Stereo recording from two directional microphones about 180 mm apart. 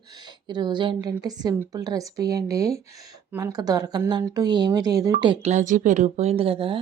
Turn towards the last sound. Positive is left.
turn(degrees=-30)  # may be behind; listen again after turning